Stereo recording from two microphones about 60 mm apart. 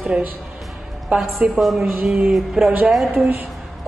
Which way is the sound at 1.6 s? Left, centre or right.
Centre.